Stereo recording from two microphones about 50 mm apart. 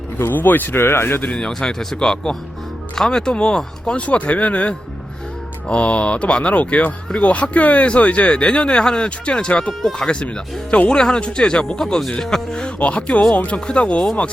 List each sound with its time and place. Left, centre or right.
0.2 s speech: left
1.4 s speech: centre